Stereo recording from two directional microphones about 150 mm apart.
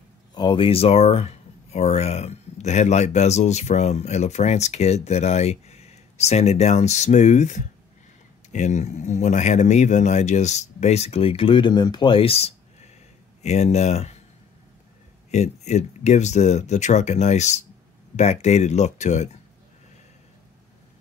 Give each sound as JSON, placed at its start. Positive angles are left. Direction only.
{"t": 0.3, "sound": "speech", "side_deg": 30}
{"t": 15.3, "sound": "speech", "side_deg": 50}